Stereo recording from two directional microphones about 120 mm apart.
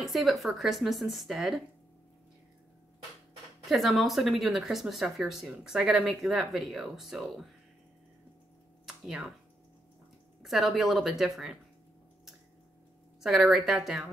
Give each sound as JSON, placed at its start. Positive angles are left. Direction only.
{"t": 0.0, "sound": "speech", "side_deg": 0}
{"t": 3.6, "sound": "speech", "side_deg": 0}
{"t": 8.8, "sound": "a sound", "side_deg": -5}
{"t": 10.4, "sound": "speech", "side_deg": 0}
{"t": 13.2, "sound": "speech", "side_deg": -5}